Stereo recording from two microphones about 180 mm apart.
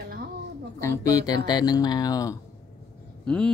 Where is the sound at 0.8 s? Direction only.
20° left (ahead or behind).